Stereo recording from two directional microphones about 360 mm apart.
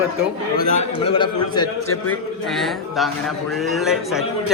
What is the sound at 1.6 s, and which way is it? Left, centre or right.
Speech, left.